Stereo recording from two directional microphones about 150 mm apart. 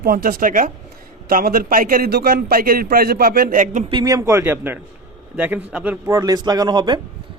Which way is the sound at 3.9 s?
25° right (ahead or behind).